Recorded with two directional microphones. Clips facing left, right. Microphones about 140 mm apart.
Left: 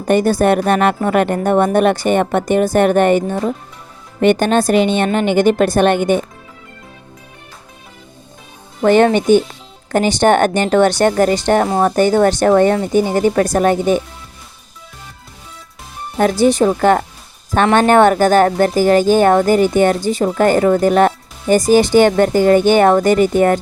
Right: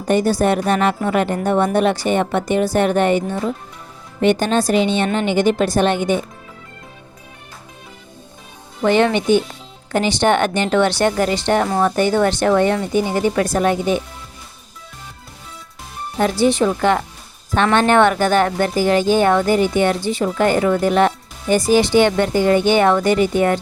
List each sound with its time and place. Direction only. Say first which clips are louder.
0.1 s a woman's voice: left 3 dB; 55° left (ahead or behind)
8.8 s speech: left 4 dB; 45° left (ahead or behind)
16.1 s speech: left 3 dB; 45° left (ahead or behind)